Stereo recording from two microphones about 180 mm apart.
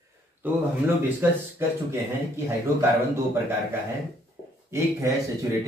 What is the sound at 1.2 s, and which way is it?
Speech, 15° right (ahead or behind).